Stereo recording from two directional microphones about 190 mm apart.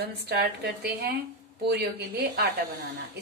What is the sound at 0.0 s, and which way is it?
A woman's voice, 60° right (ahead or behind).